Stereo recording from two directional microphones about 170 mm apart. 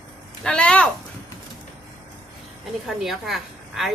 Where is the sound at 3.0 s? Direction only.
Centre (ahead or behind).